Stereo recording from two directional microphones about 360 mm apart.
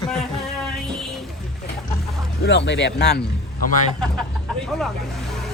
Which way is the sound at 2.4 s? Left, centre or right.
Left.